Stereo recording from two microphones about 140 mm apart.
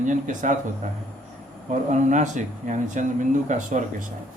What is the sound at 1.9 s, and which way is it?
Speech, 60° right (ahead or behind).